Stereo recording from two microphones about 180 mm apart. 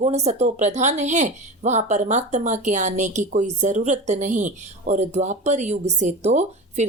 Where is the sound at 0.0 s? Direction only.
35° right (ahead or behind).